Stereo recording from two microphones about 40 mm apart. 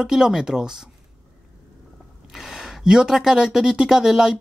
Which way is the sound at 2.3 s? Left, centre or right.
Centre.